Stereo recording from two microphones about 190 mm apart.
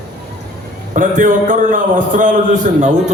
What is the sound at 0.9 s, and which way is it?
A man's voice, 45° right (ahead or behind).